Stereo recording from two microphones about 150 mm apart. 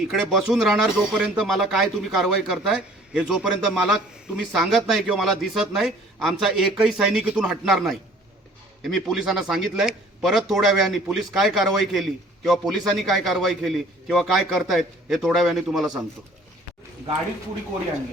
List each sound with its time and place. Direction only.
0.0 s a man's voice: 5° right (ahead or behind)